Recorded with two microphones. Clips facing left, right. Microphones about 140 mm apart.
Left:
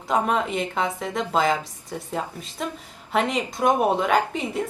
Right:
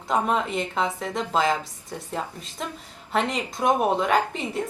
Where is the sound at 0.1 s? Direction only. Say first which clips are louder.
Left 1 dB; centre (ahead or behind).